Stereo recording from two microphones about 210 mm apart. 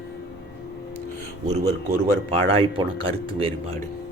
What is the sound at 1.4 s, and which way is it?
A man's voice, 30° right (ahead or behind).